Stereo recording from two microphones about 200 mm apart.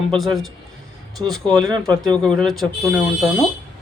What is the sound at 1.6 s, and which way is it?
Speech, 20° right (ahead or behind).